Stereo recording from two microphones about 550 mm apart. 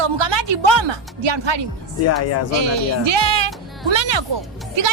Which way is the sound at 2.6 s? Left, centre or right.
Right.